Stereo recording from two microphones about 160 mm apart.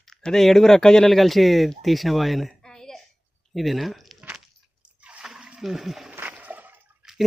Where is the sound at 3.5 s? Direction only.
Centre (ahead or behind).